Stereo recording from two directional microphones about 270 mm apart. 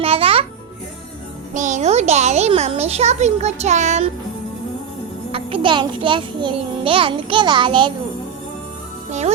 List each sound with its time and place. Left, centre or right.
0.0 s music: right
1.5 s a child's voice: right
5.3 s a child's voice: centre